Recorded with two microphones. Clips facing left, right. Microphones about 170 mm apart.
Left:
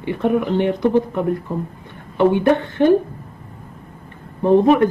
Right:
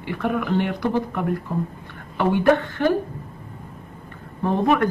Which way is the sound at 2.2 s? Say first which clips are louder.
Left 3 dB; 20° left (ahead or behind).